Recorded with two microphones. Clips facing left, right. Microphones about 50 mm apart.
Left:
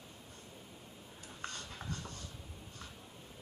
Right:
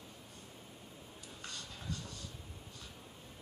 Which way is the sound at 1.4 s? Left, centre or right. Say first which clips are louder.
Left 4 dB; left.